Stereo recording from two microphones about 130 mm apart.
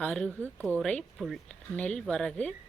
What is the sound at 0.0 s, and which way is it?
Speech, 10° left (ahead or behind).